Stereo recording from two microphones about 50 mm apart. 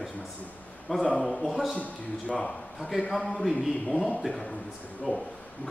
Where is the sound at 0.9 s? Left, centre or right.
Centre.